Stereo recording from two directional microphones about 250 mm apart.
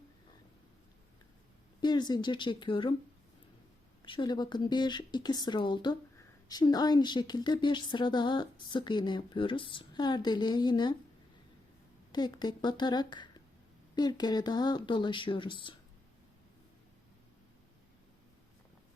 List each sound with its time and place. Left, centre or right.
1.8 s a woman's voice: centre
4.0 s a woman's voice: centre
12.1 s a woman's voice: centre